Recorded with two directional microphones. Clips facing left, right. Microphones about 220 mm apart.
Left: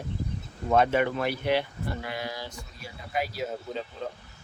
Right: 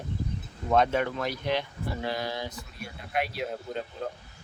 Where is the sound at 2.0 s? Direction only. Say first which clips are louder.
Right 3 dB; 30° right (ahead or behind).